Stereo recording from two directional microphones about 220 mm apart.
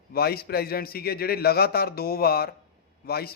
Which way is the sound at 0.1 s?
45° left (ahead or behind).